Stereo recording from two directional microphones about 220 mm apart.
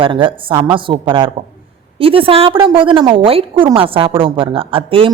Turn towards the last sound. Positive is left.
turn(degrees=-25)  # may be behind; listen again after turning